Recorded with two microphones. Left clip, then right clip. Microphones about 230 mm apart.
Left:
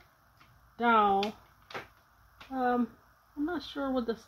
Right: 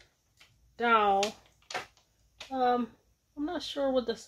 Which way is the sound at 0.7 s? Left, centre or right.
Left.